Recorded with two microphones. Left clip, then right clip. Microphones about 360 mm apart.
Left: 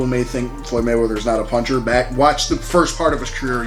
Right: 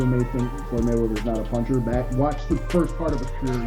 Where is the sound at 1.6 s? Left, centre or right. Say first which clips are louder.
Left 8 dB; centre.